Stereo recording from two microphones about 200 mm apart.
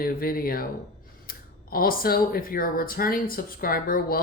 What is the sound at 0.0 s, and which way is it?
Speech, 45° left (ahead or behind).